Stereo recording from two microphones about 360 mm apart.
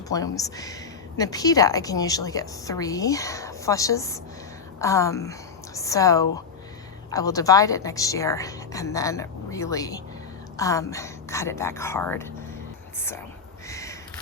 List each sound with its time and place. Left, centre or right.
0.1 s a woman's voice: centre
13.7 s sniff: centre